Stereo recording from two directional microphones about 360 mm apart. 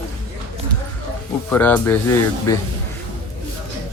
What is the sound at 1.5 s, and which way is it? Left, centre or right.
Speech, centre.